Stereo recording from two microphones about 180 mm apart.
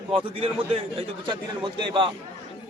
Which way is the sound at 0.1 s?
30° right (ahead or behind).